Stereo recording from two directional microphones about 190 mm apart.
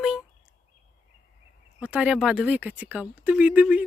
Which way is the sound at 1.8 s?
5° right (ahead or behind).